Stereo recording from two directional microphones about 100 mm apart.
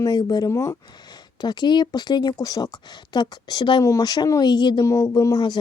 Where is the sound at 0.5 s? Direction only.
30° left (ahead or behind).